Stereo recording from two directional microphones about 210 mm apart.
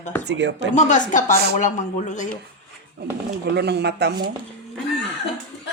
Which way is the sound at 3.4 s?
50° right (ahead or behind).